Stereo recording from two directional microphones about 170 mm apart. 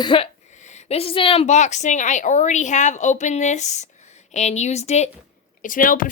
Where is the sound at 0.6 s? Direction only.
40° left (ahead or behind).